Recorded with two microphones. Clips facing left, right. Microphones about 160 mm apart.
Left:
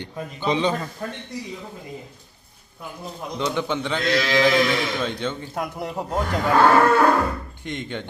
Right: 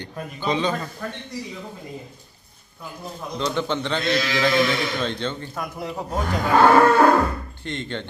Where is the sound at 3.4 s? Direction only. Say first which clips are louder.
Even; 10° left (ahead or behind).